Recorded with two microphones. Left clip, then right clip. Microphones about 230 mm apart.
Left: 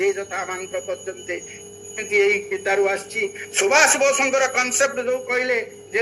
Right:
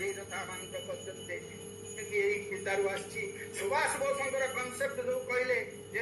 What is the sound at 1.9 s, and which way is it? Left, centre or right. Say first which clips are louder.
A man's voice: left 13 dB; left.